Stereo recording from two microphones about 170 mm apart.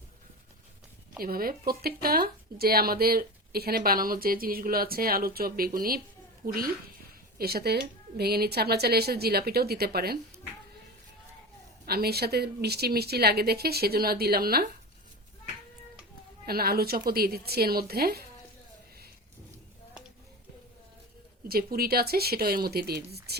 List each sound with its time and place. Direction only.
1.2 s a woman's voice: 60° right (ahead or behind)
11.9 s a woman's voice: 65° right (ahead or behind)
16.5 s speech: 65° right (ahead or behind)
21.4 s speech: 60° right (ahead or behind)